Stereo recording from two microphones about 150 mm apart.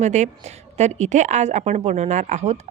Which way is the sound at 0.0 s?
50° right (ahead or behind).